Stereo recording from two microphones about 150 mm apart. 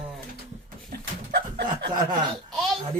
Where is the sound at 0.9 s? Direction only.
90° right.